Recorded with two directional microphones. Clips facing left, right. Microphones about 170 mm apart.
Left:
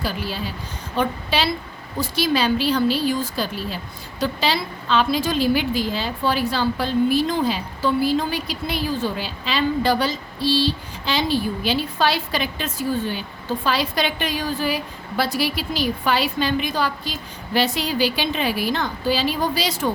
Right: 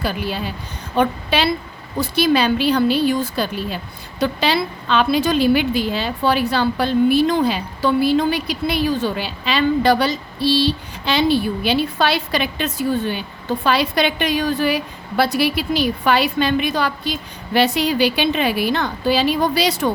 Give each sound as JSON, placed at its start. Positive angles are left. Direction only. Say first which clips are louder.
{"t": 0.0, "sound": "a woman's voice", "louder": "right 3 dB", "side_deg": -60}